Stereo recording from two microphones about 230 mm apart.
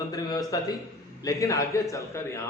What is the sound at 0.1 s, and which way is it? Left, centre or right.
A man's voice, centre.